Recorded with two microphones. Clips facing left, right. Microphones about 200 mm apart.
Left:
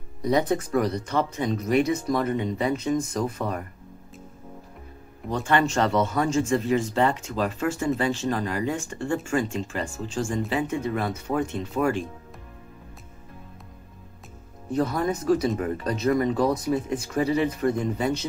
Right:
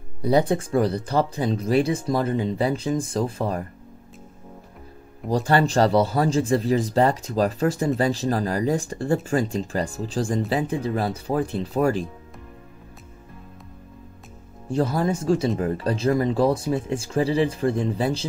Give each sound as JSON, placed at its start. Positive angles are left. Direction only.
{"t": 0.2, "sound": "speech", "side_deg": -30}
{"t": 5.3, "sound": "speech", "side_deg": -35}
{"t": 14.7, "sound": "speech", "side_deg": -30}